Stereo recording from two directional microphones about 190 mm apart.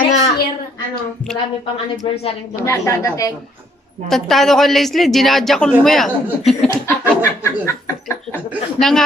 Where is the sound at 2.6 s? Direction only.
15° left (ahead or behind).